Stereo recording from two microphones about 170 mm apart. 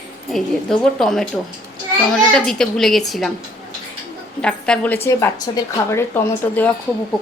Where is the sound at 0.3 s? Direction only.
Centre (ahead or behind).